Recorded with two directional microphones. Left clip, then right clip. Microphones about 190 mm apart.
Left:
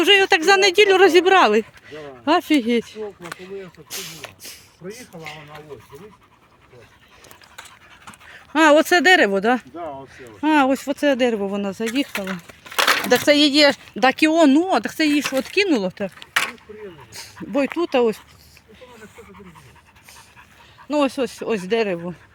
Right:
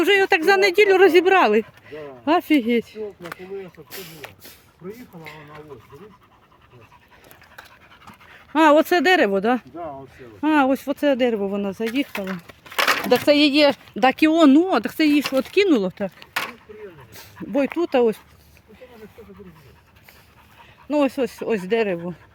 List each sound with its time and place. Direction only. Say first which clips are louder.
0.0 s speech: left 2 dB; centre (ahead or behind)
3.4 s speech: right 1 dB; 5° right (ahead or behind)
4.8 s speech: left 1 dB; 45° left (ahead or behind)
5.2 s speech: left 5 dB; 5° right (ahead or behind)
8.3 s speech: left 1 dB; 5° right (ahead or behind)
9.7 s speech: left 1 dB; 40° left (ahead or behind)
10.2 s speech: left 2 dB; centre (ahead or behind)
12.1 s speech: left 2 dB; 15° left (ahead or behind)
20.8 s speech: even; centre (ahead or behind)